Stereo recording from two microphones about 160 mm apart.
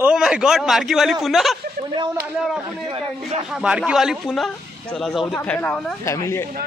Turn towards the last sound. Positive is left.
turn(degrees=15)  # may be behind; listen again after turning